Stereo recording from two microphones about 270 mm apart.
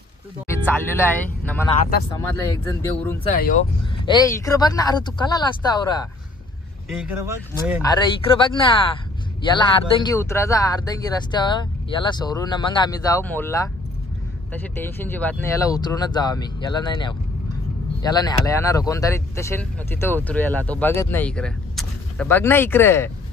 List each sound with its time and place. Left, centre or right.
0.7 s speech: centre
3.3 s speech: left
4.0 s speech: centre
6.9 s speech: centre
7.8 s speech: centre